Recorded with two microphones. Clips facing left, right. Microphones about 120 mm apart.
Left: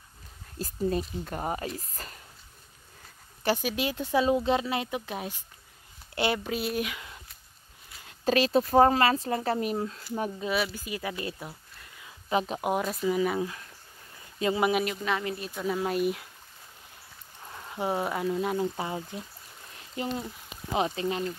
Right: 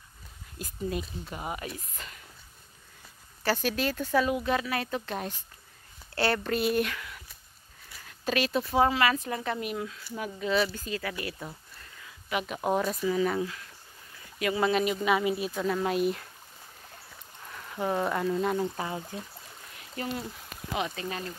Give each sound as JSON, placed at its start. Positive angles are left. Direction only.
{"t": 0.6, "sound": "speech", "side_deg": 35}
{"t": 1.2, "sound": "speech", "side_deg": 45}
{"t": 3.4, "sound": "speech", "side_deg": 15}
{"t": 8.3, "sound": "speech", "side_deg": 35}
{"t": 10.5, "sound": "speech", "side_deg": 10}
{"t": 11.3, "sound": "speech", "side_deg": 5}
{"t": 12.3, "sound": "speech", "side_deg": 30}
{"t": 12.5, "sound": "speech", "side_deg": 10}
{"t": 14.6, "sound": "speech", "side_deg": 10}
{"t": 14.9, "sound": "speech", "side_deg": -10}
{"t": 15.5, "sound": "speech", "side_deg": 5}
{"t": 17.5, "sound": "speech", "side_deg": 20}
{"t": 18.8, "sound": "speech", "side_deg": 25}